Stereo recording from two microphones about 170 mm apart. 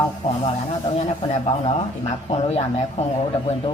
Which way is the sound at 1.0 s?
40° left (ahead or behind).